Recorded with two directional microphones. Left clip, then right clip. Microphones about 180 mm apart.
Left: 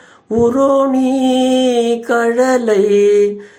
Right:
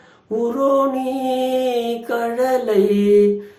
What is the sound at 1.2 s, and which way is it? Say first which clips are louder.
Mantra: left 4 dB; 40° left (ahead or behind).